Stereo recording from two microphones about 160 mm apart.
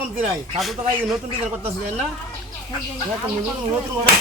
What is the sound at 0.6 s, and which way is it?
Music, centre (ahead or behind).